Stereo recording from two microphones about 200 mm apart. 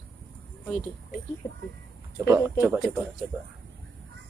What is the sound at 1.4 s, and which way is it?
Speech, 15° left (ahead or behind).